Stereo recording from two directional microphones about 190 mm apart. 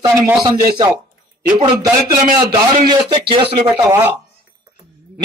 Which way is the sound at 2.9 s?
25° right (ahead or behind).